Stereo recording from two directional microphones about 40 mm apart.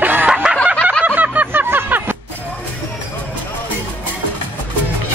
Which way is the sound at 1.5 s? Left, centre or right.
Right.